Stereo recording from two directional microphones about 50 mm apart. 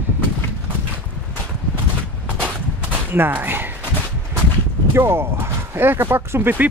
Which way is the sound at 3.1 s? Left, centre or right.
Right.